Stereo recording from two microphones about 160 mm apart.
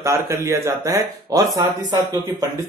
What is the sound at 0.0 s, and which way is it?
Speech, 20° right (ahead or behind).